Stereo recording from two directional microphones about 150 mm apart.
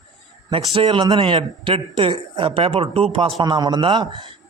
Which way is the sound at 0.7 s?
35° right (ahead or behind).